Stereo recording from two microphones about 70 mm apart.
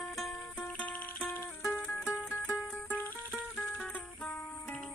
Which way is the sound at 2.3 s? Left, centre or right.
Left.